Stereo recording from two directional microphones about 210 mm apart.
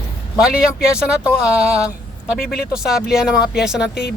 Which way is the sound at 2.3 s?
45° left (ahead or behind).